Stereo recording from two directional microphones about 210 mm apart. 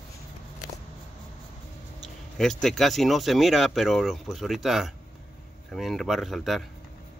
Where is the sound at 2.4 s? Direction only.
Centre (ahead or behind).